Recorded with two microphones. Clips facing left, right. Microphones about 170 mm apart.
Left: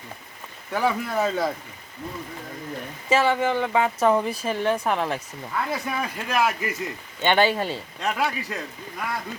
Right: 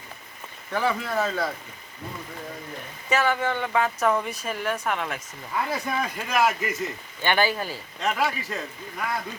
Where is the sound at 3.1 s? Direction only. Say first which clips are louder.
Left 3 dB; 25° left (ahead or behind).